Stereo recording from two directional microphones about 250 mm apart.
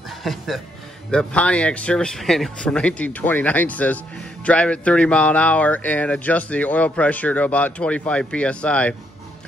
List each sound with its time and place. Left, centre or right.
0.2 s a man's voice: centre